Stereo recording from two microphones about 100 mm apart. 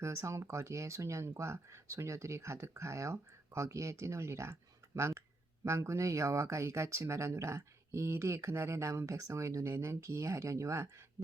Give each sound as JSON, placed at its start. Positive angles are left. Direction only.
{"t": 0.0, "sound": "speech", "side_deg": -30}